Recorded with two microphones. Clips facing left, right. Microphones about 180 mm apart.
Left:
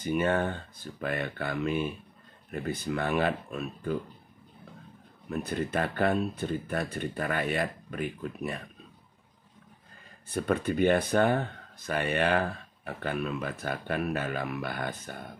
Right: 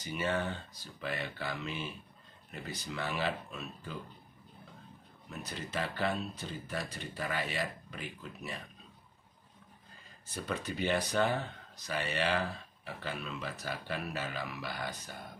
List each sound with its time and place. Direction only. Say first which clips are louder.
0.0 s speech: left 7 dB; 55° left (ahead or behind)
5.3 s speech: left 10 dB; 55° left (ahead or behind)
10.2 s speech: left 10 dB; 55° left (ahead or behind)